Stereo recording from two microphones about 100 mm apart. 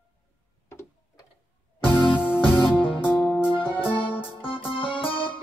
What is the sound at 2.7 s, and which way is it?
Music, 55° left (ahead or behind).